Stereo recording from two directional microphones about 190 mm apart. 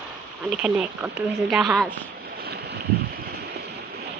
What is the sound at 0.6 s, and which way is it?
Speech, 5° right (ahead or behind).